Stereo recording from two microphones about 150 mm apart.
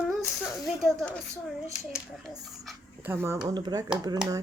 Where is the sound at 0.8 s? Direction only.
Centre (ahead or behind).